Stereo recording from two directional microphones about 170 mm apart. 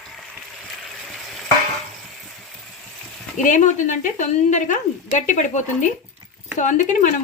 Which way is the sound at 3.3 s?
45° left (ahead or behind).